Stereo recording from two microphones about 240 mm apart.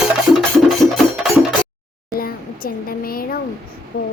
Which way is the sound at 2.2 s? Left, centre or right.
Left.